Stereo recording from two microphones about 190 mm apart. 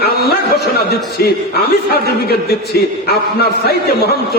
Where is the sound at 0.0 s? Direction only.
55° left (ahead or behind).